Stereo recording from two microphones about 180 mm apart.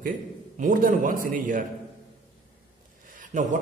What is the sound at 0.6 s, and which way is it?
A man's voice, 50° right (ahead or behind).